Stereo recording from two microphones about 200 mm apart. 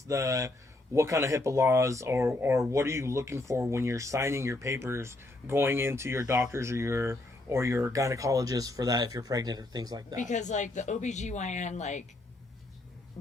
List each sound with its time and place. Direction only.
0.1 s speech: 15° right (ahead or behind)
10.2 s speech: 40° left (ahead or behind)